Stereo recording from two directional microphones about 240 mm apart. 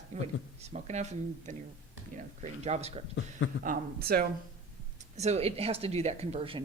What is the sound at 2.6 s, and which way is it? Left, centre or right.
Speech, right.